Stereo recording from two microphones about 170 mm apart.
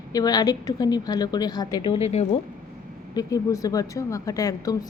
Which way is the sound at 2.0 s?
35° left (ahead or behind).